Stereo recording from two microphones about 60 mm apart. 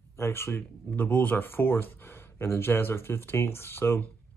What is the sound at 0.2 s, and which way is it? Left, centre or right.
Speech, left.